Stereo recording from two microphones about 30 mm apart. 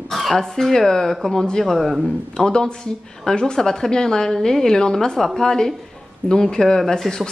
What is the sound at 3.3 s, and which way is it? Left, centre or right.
A woman's voice, left.